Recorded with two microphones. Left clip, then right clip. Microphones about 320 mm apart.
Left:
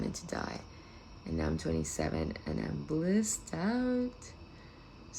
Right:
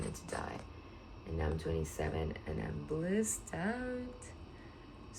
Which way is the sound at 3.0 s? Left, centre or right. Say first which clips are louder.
Even; centre.